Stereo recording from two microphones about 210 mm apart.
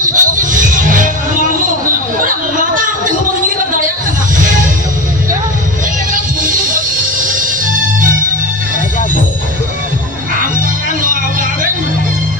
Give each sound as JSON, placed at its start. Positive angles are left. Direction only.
{"t": 0.0, "sound": "music", "side_deg": -40}
{"t": 2.2, "sound": "a sound", "side_deg": -40}
{"t": 7.3, "sound": "music", "side_deg": -40}
{"t": 11.0, "sound": "music", "side_deg": -40}